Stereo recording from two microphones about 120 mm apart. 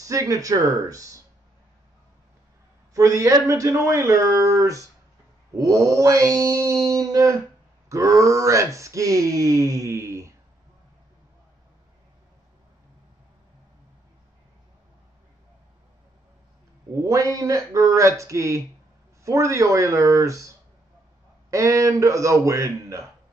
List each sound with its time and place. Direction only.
0.0 s speech: 30° right (ahead or behind)
2.9 s speech: 25° right (ahead or behind)
17.0 s speech: 30° right (ahead or behind)